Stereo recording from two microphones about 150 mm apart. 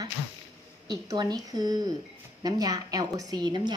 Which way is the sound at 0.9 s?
25° right (ahead or behind).